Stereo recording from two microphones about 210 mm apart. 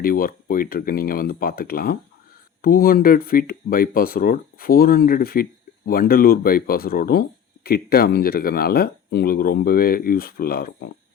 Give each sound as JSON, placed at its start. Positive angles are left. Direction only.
{"t": 0.0, "sound": "speech", "side_deg": 45}